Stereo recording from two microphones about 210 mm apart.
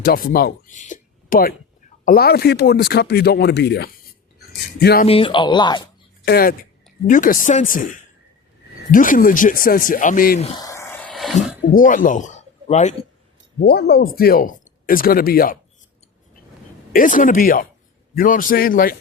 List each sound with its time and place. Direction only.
0.0 s speech: 45° left (ahead or behind)
5.0 s speech: 25° left (ahead or behind)
6.2 s speech: 45° left (ahead or behind)
8.9 s speech: 40° left (ahead or behind)
10.6 s a sound: 15° left (ahead or behind)
11.3 s speech: 40° left (ahead or behind)
13.6 s speech: 50° left (ahead or behind)
16.9 s speech: 40° left (ahead or behind)